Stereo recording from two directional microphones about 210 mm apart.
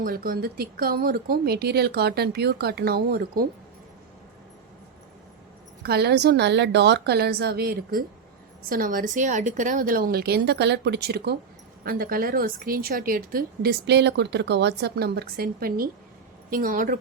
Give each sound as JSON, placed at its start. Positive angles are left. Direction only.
{"t": 0.0, "sound": "a woman's voice", "side_deg": -45}
{"t": 5.8, "sound": "a woman's voice", "side_deg": -50}